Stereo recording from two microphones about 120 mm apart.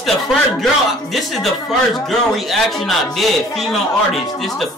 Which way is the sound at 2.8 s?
Centre (ahead or behind).